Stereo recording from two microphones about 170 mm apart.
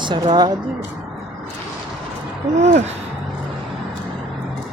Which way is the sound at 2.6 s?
45° right (ahead or behind).